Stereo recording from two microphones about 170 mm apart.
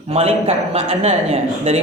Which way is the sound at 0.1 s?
35° right (ahead or behind).